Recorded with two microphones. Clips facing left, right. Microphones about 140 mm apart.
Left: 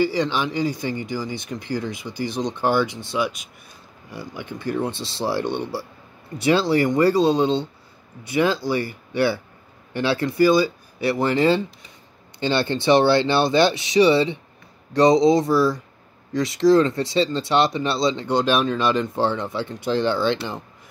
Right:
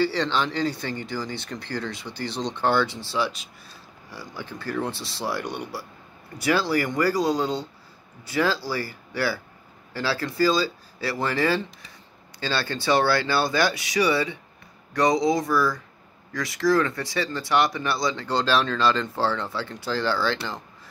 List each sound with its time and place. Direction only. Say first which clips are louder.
0.0 s speech: left 2 dB; 15° left (ahead or behind)